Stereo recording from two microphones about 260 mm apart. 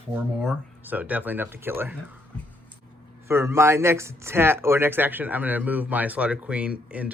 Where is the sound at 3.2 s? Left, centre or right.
Centre.